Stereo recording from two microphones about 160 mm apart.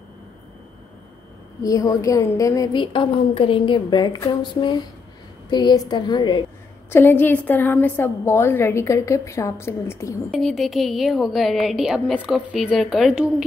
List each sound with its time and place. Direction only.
1.6 s a woman's voice: 20° left (ahead or behind)
6.9 s a woman's voice: 15° left (ahead or behind)
10.3 s a woman's voice: centre (ahead or behind)